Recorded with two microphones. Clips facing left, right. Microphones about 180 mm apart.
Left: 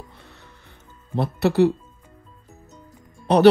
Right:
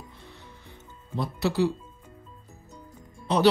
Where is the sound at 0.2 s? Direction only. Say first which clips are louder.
Right 1 dB; 65° left (ahead or behind).